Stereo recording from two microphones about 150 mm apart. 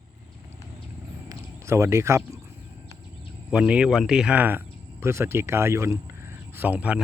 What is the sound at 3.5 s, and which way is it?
Speech, 5° right (ahead or behind).